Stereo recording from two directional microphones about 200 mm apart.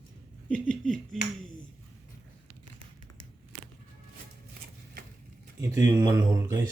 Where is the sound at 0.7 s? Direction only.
Centre (ahead or behind).